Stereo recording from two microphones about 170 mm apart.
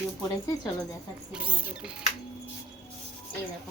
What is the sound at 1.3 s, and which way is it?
Speech, 10° right (ahead or behind).